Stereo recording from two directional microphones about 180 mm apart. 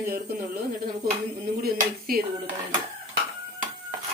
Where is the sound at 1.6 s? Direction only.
55° right (ahead or behind).